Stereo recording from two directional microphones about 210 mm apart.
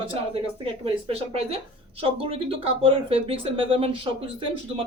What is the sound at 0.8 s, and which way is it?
Speech, 30° right (ahead or behind).